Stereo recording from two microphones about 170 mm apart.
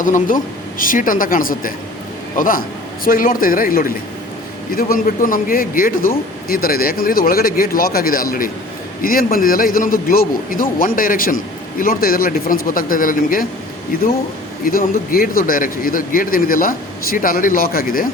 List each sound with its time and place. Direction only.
0.0 s a woman's voice: 50° left (ahead or behind)
14.6 s speech: 55° left (ahead or behind)